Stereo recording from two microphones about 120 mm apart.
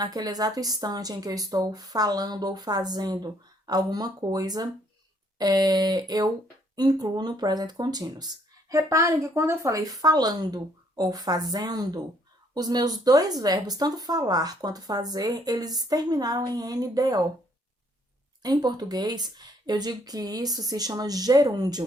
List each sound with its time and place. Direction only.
0.0 s speech: 35° right (ahead or behind)
18.4 s speech: 35° right (ahead or behind)